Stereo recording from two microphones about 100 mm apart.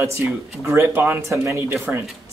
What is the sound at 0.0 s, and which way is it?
Speech, 30° right (ahead or behind).